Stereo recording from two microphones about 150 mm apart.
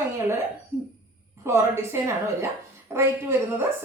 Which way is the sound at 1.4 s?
15° right (ahead or behind).